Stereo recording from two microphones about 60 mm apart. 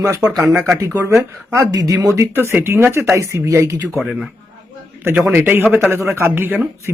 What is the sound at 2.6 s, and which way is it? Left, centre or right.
Speech, right.